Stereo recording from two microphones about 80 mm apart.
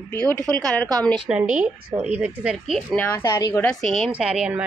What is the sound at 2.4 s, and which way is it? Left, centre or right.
Speech, centre.